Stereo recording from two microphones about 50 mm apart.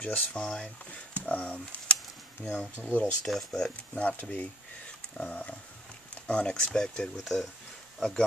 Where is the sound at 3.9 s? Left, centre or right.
Left.